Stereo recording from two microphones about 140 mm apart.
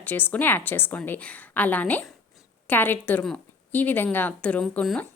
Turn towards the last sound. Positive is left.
turn(degrees=10)  # may be behind; listen again after turning